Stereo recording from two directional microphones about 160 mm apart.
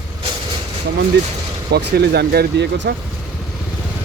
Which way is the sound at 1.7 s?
90° right.